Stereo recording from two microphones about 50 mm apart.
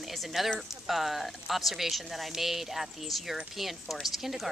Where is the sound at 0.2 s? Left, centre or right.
Centre.